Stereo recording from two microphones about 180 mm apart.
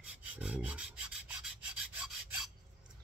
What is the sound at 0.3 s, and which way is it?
Rub, 5° right (ahead or behind).